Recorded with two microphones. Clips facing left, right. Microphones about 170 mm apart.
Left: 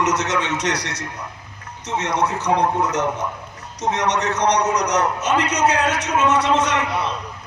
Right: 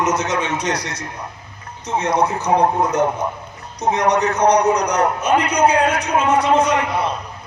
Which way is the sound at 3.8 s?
90° left.